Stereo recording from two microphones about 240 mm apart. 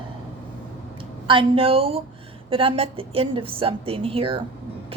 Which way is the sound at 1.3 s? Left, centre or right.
Right.